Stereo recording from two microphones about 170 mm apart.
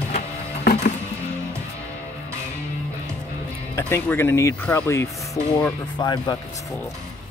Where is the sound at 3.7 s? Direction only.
15° left (ahead or behind).